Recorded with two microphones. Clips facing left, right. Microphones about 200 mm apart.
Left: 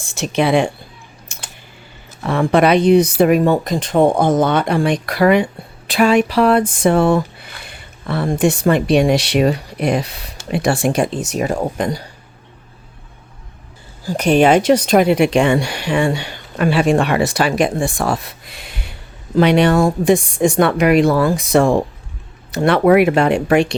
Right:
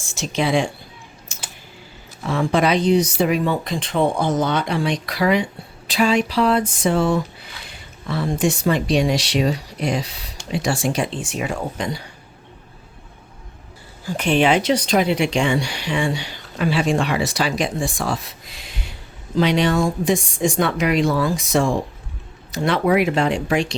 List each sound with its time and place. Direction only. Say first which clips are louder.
0.0 s speech: left 5 dB; 60° left (ahead or behind)
1.3 s typing: left 1 dB; 60° left (ahead or behind)
2.2 s speech: left 5 dB; 60° left (ahead or behind); by 12.0 s 45° left (ahead or behind)
14.0 s speech: left 5 dB; 40° left (ahead or behind); by 23.7 s 60° left (ahead or behind)